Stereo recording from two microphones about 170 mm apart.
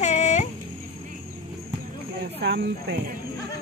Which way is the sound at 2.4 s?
85° right.